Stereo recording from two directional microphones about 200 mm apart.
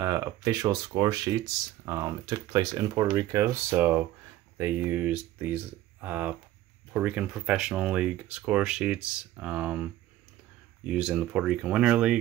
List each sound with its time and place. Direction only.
0.0 s speech: 15° right (ahead or behind)